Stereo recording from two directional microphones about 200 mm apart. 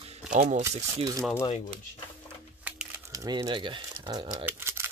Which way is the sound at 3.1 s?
20° right (ahead or behind).